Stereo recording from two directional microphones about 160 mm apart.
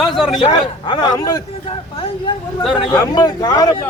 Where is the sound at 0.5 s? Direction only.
25° left (ahead or behind).